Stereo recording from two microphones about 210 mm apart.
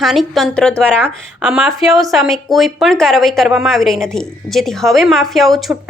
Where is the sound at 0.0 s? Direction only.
Centre (ahead or behind).